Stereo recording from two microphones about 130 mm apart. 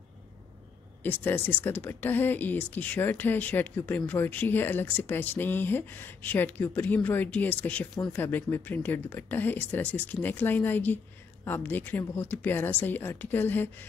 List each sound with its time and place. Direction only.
1.0 s speech: 15° left (ahead or behind)